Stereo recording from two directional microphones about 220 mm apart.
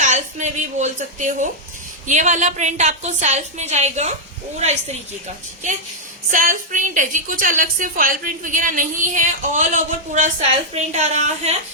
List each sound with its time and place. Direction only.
0.0 s a woman's voice: 35° right (ahead or behind)
6.3 s a woman's voice: 35° right (ahead or behind)